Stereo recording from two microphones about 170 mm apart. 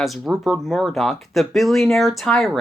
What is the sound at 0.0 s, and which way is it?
Speech, centre (ahead or behind).